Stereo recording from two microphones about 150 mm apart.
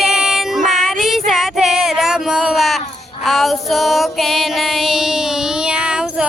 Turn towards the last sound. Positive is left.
turn(degrees=-5)  # may be behind; listen again after turning